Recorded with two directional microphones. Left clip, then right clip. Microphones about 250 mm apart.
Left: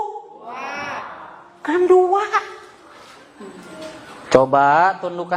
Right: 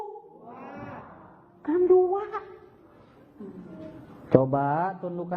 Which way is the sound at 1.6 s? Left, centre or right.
Centre.